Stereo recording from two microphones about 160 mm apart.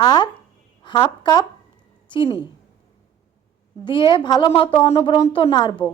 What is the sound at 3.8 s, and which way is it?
A woman's voice, 30° left (ahead or behind).